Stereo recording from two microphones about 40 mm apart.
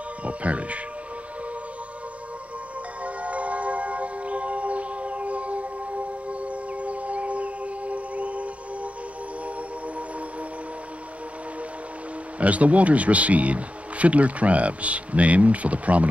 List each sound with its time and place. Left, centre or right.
0.2 s speech: right
3.0 s music: right
6.4 s civil defense siren: right
12.4 s speech: right